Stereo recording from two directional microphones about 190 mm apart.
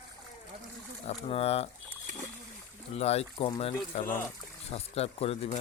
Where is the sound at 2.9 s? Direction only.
35° left (ahead or behind).